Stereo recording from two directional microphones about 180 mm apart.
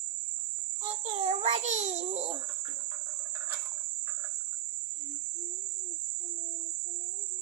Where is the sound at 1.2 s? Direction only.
40° right (ahead or behind).